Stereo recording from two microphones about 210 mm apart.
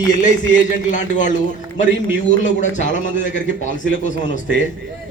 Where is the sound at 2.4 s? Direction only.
35° left (ahead or behind).